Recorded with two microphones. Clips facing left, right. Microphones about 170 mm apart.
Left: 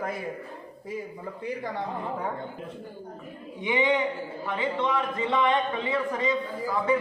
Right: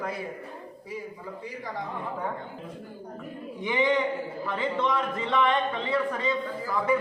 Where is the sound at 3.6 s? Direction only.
20° left (ahead or behind).